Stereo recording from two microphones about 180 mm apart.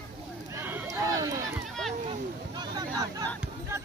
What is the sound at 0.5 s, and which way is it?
Run, 10° right (ahead or behind).